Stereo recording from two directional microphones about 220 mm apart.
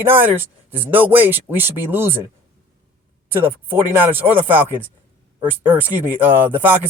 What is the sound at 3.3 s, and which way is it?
Speech, 10° right (ahead or behind).